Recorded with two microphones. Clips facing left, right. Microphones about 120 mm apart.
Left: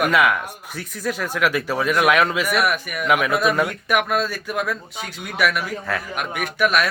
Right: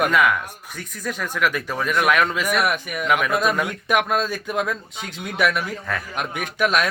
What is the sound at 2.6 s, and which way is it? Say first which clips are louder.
Speech: left 1 dB; 25° right (ahead or behind).